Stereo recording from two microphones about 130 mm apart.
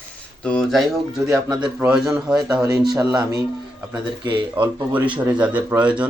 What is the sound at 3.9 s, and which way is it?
Speech, 35° right (ahead or behind).